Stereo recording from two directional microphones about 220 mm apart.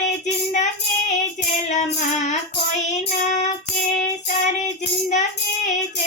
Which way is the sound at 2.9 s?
30° left (ahead or behind).